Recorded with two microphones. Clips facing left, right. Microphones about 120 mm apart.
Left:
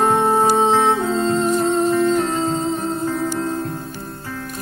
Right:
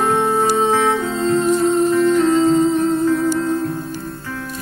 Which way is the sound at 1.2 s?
45° left (ahead or behind).